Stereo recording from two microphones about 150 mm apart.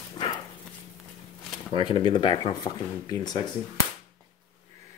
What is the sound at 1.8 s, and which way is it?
Speech, 35° left (ahead or behind).